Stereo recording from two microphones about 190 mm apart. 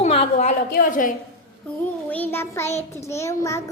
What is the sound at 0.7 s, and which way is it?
Speech, 45° left (ahead or behind).